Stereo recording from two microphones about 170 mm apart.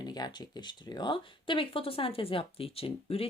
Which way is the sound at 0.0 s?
25° left (ahead or behind).